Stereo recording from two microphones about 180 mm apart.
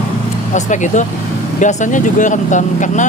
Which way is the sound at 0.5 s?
40° left (ahead or behind).